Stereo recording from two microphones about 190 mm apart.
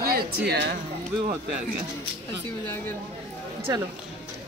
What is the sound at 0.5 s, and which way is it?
Speech, 60° right (ahead or behind).